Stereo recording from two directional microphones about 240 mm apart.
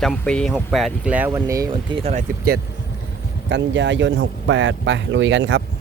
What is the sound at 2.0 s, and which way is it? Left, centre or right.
Speech, right.